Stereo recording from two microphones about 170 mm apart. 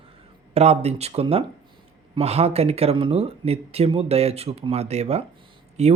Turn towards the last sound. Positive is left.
turn(degrees=-40)  # may be behind; listen again after turning